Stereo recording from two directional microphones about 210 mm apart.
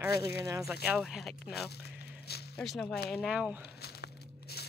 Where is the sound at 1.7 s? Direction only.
50° left (ahead or behind).